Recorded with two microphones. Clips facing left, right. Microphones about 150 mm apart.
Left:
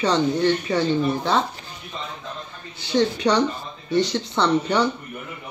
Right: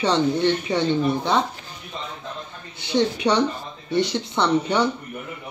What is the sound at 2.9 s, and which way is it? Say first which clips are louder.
Speech: left 1 dB; 20° right (ahead or behind).